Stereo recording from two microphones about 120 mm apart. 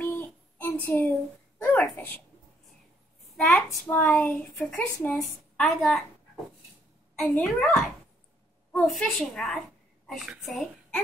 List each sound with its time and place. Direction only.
0.0 s child singing: 15° left (ahead or behind)
1.6 s a sound: 15° left (ahead or behind)
3.3 s a child's voice: 15° left (ahead or behind)
5.7 s a woman's voice: centre (ahead or behind)
7.2 s a woman's voice: 5° left (ahead or behind)